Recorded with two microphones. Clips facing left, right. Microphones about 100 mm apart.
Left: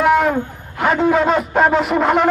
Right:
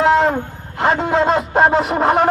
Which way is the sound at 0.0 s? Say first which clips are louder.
Right 1 dB; 30° right (ahead or behind).